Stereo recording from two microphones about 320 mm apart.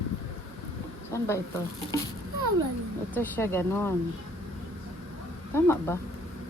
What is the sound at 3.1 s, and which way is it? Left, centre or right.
Speech, centre.